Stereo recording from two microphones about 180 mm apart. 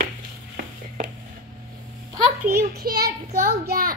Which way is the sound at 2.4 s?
60° right (ahead or behind).